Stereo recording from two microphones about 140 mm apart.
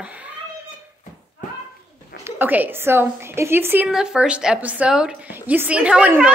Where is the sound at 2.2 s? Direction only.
15° right (ahead or behind).